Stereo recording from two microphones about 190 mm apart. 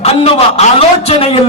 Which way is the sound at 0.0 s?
30° left (ahead or behind).